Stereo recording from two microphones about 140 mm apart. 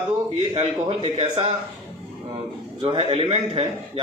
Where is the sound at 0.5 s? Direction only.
45° right (ahead or behind).